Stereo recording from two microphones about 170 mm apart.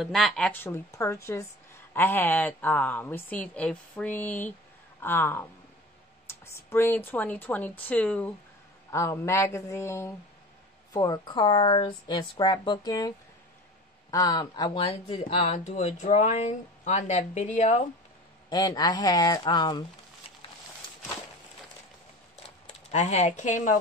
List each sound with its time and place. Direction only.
0.0 s a woman's voice: centre (ahead or behind); by 13.1 s 25° left (ahead or behind)
14.1 s speech: 25° left (ahead or behind); by 17.8 s 45° left (ahead or behind)
18.5 s speech: 25° left (ahead or behind)
22.7 s speech: 40° left (ahead or behind)